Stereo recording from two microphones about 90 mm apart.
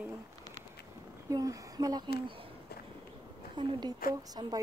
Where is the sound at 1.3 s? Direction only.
40° right (ahead or behind).